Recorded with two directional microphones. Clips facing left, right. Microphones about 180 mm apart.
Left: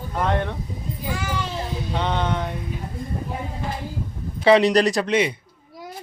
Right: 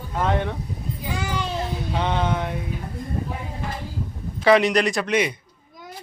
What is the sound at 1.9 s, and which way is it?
Speech, 5° right (ahead or behind).